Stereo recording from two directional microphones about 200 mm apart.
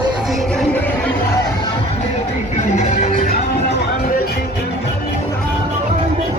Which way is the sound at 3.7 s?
50° left (ahead or behind).